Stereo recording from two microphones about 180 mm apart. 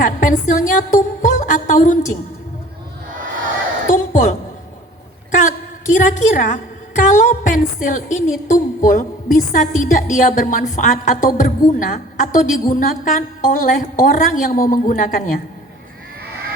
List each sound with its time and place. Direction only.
0.0 s music: 45° left (ahead or behind)
3.8 s a sound: 45° left (ahead or behind)
5.3 s a woman's voice: 45° left (ahead or behind)